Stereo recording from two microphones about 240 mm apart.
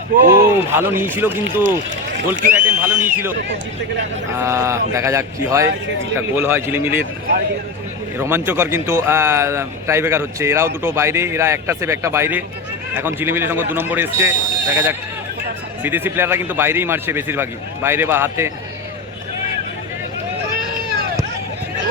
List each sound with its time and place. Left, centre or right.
0.3 s speech: centre
4.4 s speech: centre
8.2 s speech: centre